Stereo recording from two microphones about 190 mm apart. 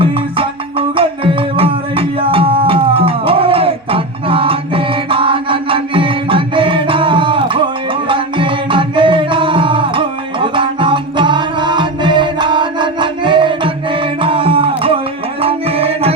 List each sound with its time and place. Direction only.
0.0 s music: 30° right (ahead or behind)